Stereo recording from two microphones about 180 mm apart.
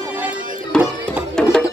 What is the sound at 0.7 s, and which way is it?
Music, 5° left (ahead or behind).